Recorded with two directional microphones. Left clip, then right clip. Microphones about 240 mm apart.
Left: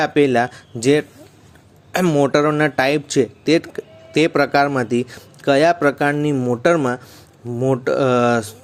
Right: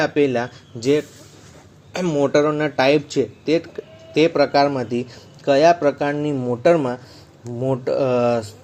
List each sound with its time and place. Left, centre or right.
0.0 s speech: left